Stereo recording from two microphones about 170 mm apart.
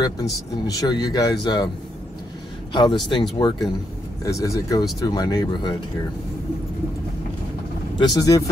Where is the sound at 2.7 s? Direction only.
25° left (ahead or behind).